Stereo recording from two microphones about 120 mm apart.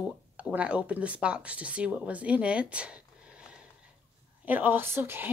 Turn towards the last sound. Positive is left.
turn(degrees=-20)  # may be behind; listen again after turning